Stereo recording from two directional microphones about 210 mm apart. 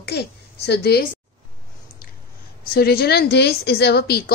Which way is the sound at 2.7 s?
50° left (ahead or behind).